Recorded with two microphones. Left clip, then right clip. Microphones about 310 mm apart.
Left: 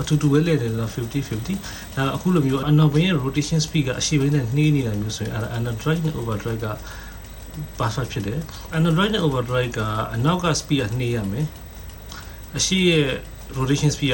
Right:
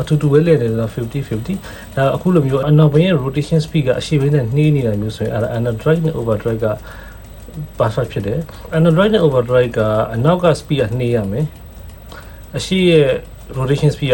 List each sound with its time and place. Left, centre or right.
0.0 s speech: centre
7.8 s speech: centre